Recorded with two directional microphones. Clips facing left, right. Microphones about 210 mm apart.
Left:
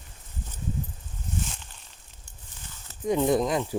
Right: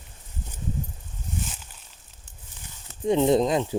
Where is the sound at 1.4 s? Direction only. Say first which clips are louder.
Right 1 dB; 5° right (ahead or behind).